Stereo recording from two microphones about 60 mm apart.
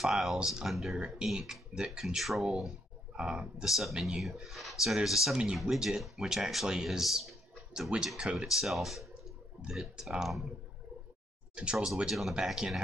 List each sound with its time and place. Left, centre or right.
0.0 s speech: centre
0.9 s speech: centre
8.2 s speech: centre
8.5 s speech: centre
9.6 s speech: centre
11.5 s speech: centre